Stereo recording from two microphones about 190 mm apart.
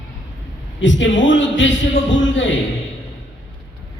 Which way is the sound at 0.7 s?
75° left (ahead or behind).